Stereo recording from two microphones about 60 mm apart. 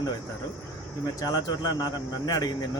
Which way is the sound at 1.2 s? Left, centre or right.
Left.